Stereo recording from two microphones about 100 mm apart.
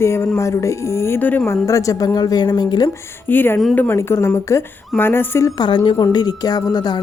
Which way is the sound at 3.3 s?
20° left (ahead or behind).